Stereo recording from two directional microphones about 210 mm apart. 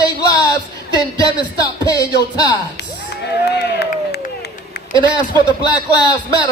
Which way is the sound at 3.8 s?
50° left (ahead or behind).